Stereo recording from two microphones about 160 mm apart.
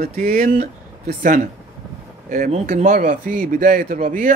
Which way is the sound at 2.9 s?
65° right (ahead or behind).